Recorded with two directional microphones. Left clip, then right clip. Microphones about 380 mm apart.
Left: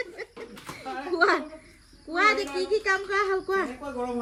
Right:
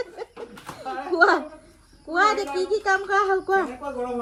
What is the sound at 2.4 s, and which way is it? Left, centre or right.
Speech, centre.